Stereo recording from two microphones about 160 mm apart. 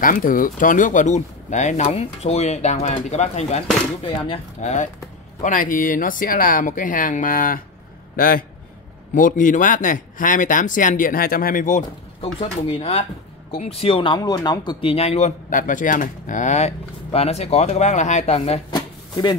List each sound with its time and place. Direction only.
0.0 s speech: 60° left (ahead or behind)
4.0 s speech: 30° left (ahead or behind)
4.6 s speech: 50° left (ahead or behind)
9.1 s speech: 55° left (ahead or behind)
12.2 s speech: 35° left (ahead or behind)